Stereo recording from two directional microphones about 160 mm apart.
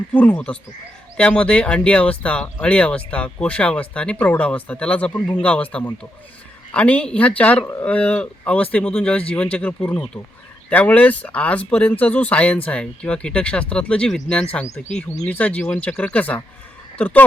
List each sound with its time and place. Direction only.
0.1 s speech: 10° left (ahead or behind)